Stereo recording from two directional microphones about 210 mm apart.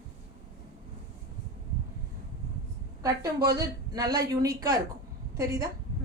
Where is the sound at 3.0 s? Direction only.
15° right (ahead or behind).